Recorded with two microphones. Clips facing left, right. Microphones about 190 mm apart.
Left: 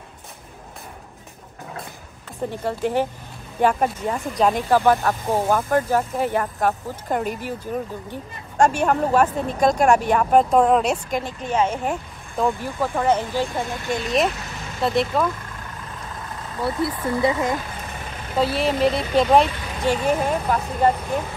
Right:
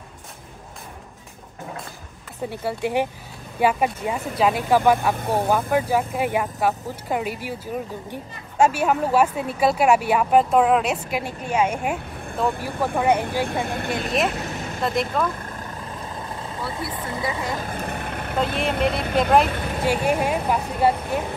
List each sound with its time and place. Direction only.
2.5 s a woman's voice: 10° right (ahead or behind)
13.5 s speech: 60° right (ahead or behind)
14.8 s speech: centre (ahead or behind)
16.2 s vehicle: 25° right (ahead or behind)
17.6 s vehicle: 50° right (ahead or behind)
18.6 s speech: centre (ahead or behind)
18.9 s speech: 55° right (ahead or behind)
19.8 s a woman's voice: 10° right (ahead or behind)